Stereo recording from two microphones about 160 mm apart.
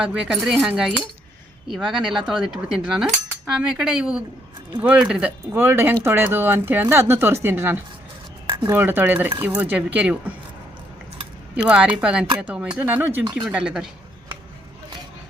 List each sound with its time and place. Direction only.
0.0 s speech: 5° right (ahead or behind)
8.4 s a sound: 25° right (ahead or behind)
8.7 s speech: 10° right (ahead or behind)
11.7 s speech: 10° right (ahead or behind)